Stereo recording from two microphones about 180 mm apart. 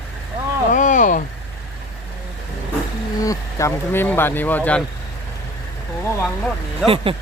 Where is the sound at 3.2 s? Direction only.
15° left (ahead or behind).